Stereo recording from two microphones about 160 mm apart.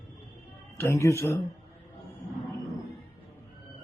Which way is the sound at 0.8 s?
15° left (ahead or behind).